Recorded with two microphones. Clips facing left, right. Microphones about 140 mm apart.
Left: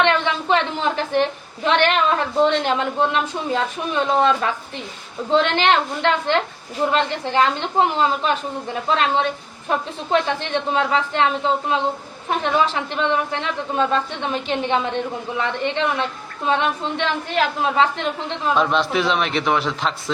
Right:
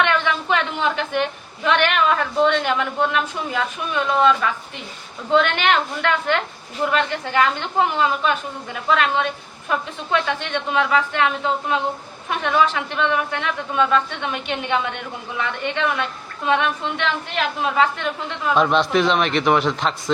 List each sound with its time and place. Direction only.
0.0 s a woman's voice: 25° left (ahead or behind)
18.5 s a man's voice: centre (ahead or behind)